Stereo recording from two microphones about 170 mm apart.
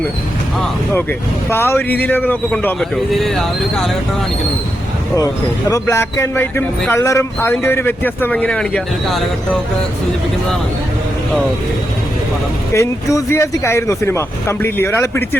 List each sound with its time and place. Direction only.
1.5 s speech: 15° left (ahead or behind)
5.1 s speech: 20° left (ahead or behind); by 9.6 s centre (ahead or behind)
12.7 s speech: 20° left (ahead or behind)